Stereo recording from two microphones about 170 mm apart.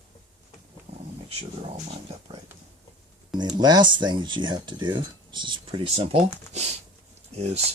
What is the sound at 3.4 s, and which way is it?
Speech, 25° right (ahead or behind).